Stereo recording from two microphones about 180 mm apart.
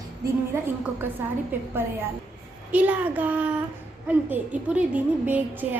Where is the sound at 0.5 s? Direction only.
10° right (ahead or behind).